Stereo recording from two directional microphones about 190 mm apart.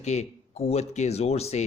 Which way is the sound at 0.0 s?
35° left (ahead or behind).